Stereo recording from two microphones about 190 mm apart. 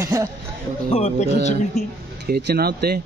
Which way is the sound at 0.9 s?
35° left (ahead or behind).